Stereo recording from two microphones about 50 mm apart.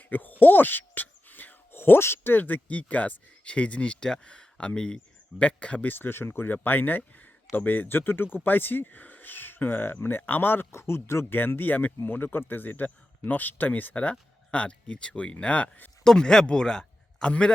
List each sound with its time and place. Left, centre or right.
0.0 s a sound: left
2.3 s speech: left
5.9 s speech: left
10.7 s speech: left
11.3 s speech: left
16.0 s speech: centre